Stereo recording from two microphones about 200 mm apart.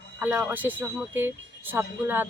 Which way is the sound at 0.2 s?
10° right (ahead or behind).